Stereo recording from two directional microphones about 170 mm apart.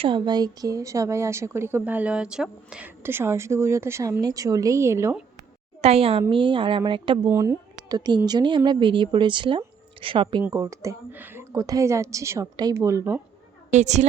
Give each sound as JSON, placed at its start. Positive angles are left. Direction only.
{"t": 0.0, "sound": "a woman's voice", "side_deg": -25}
{"t": 5.8, "sound": "a woman's voice", "side_deg": -35}
{"t": 7.3, "sound": "a woman's voice", "side_deg": -20}
{"t": 10.4, "sound": "a woman's voice", "side_deg": -15}
{"t": 13.7, "sound": "a woman's voice", "side_deg": -40}